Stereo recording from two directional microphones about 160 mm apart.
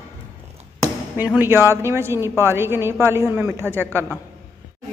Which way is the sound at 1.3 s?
15° right (ahead or behind).